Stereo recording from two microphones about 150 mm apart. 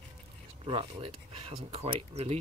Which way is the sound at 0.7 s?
35° right (ahead or behind).